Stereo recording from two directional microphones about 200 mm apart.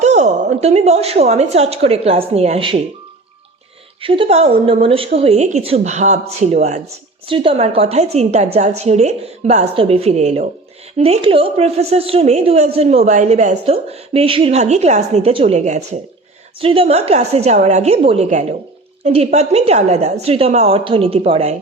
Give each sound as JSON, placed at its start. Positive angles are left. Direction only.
{"t": 0.0, "sound": "a woman's voice", "side_deg": -35}
{"t": 4.0, "sound": "a woman's voice", "side_deg": -25}